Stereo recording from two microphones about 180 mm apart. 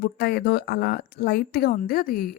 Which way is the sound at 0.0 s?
60° left (ahead or behind).